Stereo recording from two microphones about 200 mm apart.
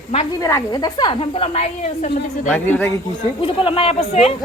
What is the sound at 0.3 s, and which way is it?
A woman's voice, 15° left (ahead or behind).